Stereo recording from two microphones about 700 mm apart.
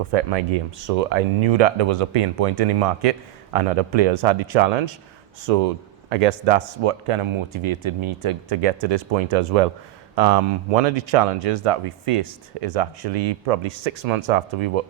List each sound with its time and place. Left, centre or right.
0.1 s speech: right